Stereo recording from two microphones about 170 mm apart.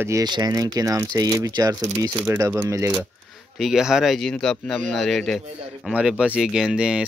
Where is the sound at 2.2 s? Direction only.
10° right (ahead or behind).